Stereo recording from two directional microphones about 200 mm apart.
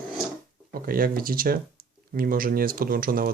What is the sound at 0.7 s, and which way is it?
Speech, 45° right (ahead or behind).